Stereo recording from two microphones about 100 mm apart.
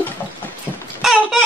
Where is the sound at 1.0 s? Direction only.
5° right (ahead or behind).